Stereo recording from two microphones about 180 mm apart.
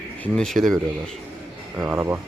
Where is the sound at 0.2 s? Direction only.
5° left (ahead or behind).